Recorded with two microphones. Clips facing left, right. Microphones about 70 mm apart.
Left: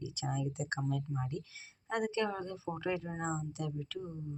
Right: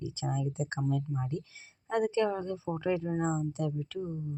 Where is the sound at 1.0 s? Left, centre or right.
Centre.